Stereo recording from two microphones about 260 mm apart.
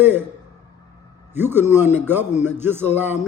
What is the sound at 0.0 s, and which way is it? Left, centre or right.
Speech, centre.